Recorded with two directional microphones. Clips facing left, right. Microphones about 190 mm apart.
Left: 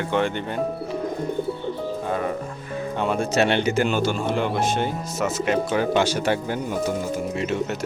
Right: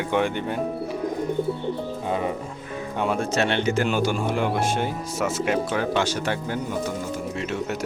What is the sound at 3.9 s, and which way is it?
Speech, 10° right (ahead or behind).